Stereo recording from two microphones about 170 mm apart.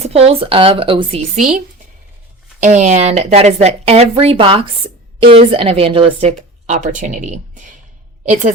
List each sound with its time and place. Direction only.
0.3 s a woman's voice: 35° right (ahead or behind)
1.4 s a woman's voice: 50° right (ahead or behind)